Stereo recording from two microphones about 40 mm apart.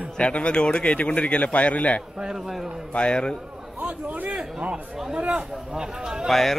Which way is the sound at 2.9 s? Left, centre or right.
Left.